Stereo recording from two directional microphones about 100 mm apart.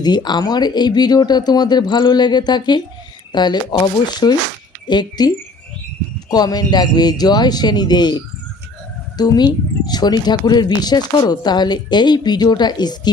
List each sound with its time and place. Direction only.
0.0 s speech: 45° left (ahead or behind)
6.3 s speech: 40° left (ahead or behind)